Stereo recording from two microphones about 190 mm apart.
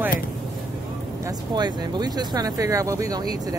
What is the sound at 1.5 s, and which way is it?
Speech, 20° right (ahead or behind).